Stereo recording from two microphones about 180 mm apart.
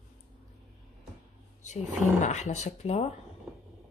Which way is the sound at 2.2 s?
40° left (ahead or behind).